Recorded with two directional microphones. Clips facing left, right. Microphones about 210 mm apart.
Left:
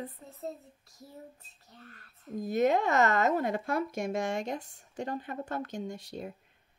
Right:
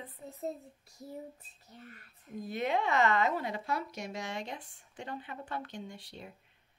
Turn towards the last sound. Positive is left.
turn(degrees=45)  # may be behind; listen again after turning